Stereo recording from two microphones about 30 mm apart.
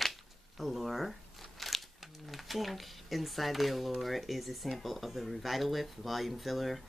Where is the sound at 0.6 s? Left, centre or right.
Centre.